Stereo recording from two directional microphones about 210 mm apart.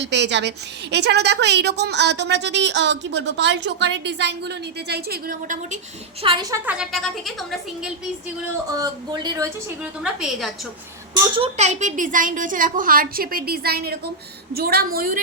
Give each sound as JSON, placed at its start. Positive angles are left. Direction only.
{"t": 0.0, "sound": "a woman's voice", "side_deg": -55}
{"t": 6.2, "sound": "a woman's voice", "side_deg": -20}
{"t": 6.7, "sound": "a woman's voice", "side_deg": 0}
{"t": 8.7, "sound": "speech", "side_deg": -15}
{"t": 10.0, "sound": "a woman's voice", "side_deg": -5}
{"t": 11.3, "sound": "a woman's voice", "side_deg": -30}